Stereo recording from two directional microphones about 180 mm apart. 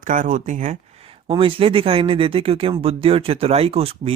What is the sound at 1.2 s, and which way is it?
Speech, 30° right (ahead or behind).